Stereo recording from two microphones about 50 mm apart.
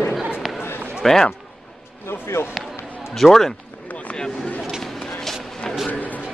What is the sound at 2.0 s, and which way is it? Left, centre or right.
Speech, left.